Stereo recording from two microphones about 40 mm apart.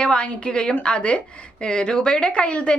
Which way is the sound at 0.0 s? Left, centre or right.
Left.